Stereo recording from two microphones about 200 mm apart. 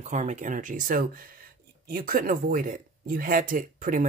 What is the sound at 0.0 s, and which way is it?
Speech, 35° right (ahead or behind).